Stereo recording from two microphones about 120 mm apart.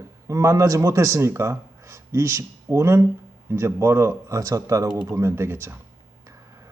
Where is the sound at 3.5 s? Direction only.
20° right (ahead or behind).